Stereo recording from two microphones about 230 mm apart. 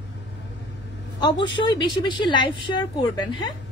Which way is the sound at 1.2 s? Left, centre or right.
Centre.